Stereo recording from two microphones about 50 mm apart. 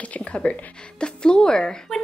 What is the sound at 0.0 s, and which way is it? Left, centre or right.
A woman's voice, left.